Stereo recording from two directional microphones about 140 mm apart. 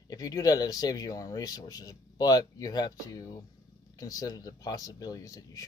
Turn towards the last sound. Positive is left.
turn(degrees=25)  # may be behind; listen again after turning